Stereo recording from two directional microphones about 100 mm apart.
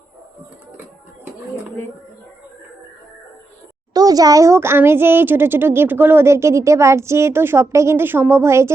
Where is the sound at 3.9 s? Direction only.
40° right (ahead or behind).